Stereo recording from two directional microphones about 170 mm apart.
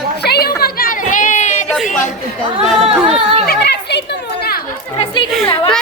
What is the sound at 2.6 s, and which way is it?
Speech, 5° right (ahead or behind).